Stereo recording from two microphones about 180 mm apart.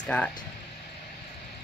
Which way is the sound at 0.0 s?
5° left (ahead or behind).